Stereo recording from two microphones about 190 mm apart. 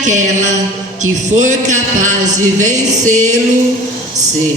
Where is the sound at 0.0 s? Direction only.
40° right (ahead or behind).